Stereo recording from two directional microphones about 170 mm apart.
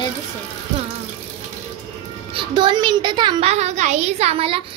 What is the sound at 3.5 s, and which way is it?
A woman's voice, 40° right (ahead or behind).